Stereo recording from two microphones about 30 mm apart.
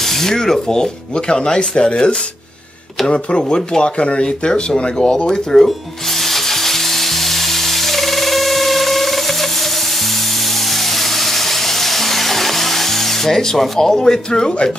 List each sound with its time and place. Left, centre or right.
0.0 s speech: centre; by 4.9 s left
4.9 s speech: left
6.1 s frying: centre
10.7 s music: centre
13.7 s a man's voice: centre